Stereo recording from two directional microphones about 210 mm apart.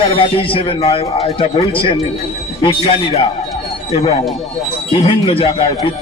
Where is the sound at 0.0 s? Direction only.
25° left (ahead or behind).